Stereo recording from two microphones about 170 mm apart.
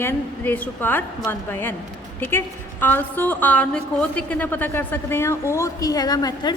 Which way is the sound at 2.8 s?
10° left (ahead or behind).